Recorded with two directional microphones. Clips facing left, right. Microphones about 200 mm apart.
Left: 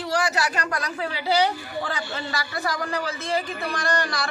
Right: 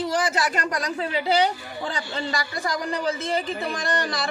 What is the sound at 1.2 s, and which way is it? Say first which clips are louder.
Speech: even; centre (ahead or behind).